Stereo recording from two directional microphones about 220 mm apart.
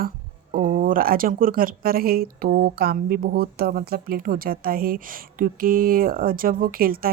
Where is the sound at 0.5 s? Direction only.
40° right (ahead or behind).